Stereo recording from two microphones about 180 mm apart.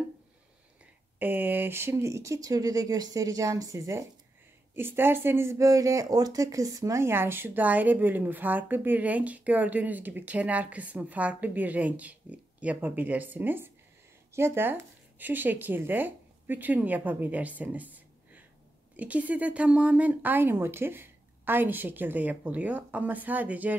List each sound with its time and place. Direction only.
1.2 s speech: 10° right (ahead or behind)